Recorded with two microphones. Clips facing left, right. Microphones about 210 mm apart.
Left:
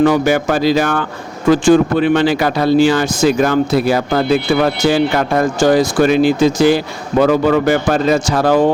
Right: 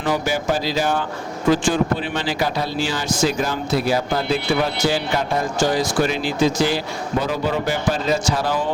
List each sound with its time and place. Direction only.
0.0 s speech: 60° left (ahead or behind)
5.5 s speech: 55° left (ahead or behind)